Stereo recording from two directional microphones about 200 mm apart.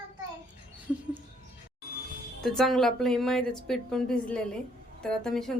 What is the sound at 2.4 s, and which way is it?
A woman's voice, centre (ahead or behind).